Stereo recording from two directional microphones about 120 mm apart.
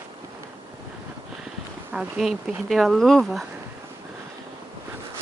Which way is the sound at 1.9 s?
5° right (ahead or behind).